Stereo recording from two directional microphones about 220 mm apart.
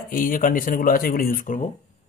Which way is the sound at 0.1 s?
40° left (ahead or behind).